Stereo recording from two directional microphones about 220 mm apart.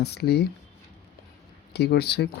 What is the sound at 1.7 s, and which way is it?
Speech, 50° left (ahead or behind).